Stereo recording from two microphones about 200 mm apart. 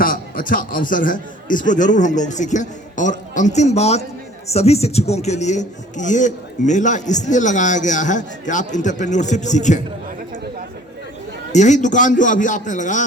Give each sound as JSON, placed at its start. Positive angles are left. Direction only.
{"t": 0.0, "sound": "a man's voice", "side_deg": 45}
{"t": 11.5, "sound": "a man's voice", "side_deg": 35}